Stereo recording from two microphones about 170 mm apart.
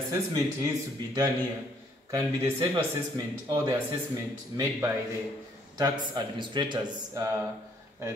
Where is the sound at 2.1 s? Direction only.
20° right (ahead or behind).